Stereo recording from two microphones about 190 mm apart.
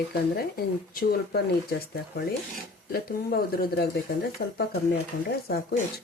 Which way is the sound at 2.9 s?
50° left (ahead or behind).